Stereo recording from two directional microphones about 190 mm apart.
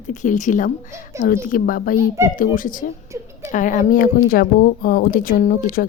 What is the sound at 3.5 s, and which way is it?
A woman's voice, 45° left (ahead or behind).